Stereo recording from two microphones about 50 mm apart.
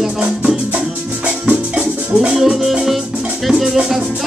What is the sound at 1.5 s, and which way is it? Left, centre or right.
Music, right.